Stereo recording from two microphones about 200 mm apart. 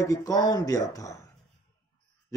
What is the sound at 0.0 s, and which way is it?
Speech, 15° left (ahead or behind).